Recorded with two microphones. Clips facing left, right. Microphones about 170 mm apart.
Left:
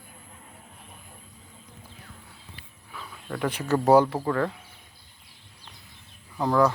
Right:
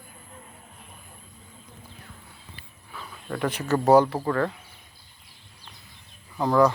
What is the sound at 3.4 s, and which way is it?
Speech, 10° left (ahead or behind).